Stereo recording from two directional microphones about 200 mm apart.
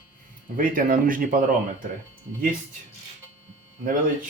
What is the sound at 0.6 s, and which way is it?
Speech, 45° right (ahead or behind).